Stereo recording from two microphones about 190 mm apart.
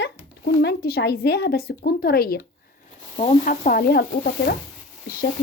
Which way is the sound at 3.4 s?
45° left (ahead or behind).